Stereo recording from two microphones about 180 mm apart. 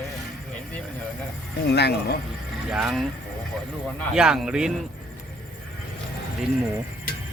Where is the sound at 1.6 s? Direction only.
65° left (ahead or behind).